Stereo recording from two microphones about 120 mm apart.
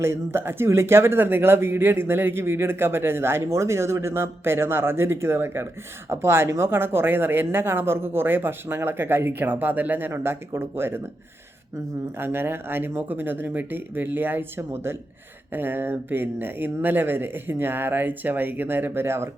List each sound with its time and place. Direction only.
0.0 s speech: 20° right (ahead or behind)
12.2 s speech: 20° right (ahead or behind)